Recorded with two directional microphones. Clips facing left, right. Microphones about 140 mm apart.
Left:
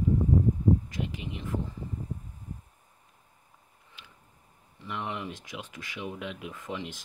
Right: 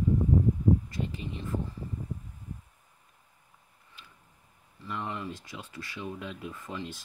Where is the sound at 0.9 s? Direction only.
90° left.